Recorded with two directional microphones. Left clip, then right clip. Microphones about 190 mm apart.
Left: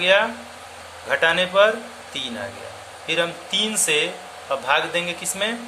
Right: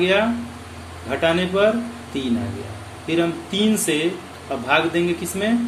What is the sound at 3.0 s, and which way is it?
Speech, 30° left (ahead or behind).